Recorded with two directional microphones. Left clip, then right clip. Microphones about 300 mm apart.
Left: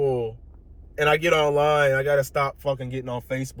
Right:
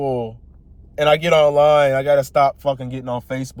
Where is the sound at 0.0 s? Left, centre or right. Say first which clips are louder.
Right 2 dB; right.